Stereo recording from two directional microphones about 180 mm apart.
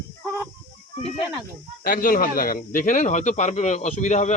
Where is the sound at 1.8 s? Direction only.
50° left (ahead or behind).